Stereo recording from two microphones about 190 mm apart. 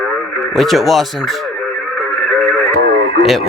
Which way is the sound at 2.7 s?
60° right (ahead or behind).